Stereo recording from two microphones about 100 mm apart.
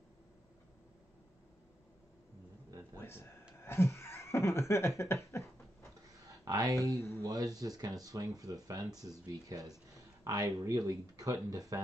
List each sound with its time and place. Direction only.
3.0 s speech: 25° left (ahead or behind)
3.6 s a sound: 25° left (ahead or behind)
6.4 s speech: 40° right (ahead or behind)